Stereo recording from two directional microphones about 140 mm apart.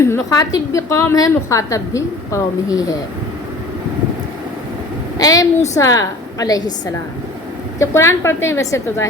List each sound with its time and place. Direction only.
0.0 s a woman's voice: 25° left (ahead or behind)
5.1 s a woman's voice: 25° left (ahead or behind)
7.8 s a woman's voice: 20° left (ahead or behind)